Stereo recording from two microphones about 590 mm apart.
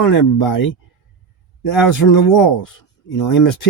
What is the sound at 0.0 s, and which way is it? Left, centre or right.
Speech, left.